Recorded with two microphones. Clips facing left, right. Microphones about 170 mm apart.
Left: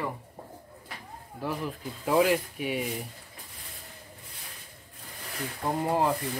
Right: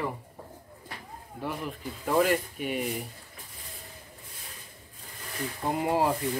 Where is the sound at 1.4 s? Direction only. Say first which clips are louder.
Left 1 dB; centre (ahead or behind).